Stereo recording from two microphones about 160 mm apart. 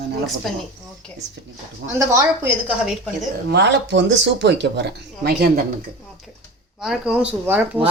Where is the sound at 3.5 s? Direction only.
90° right.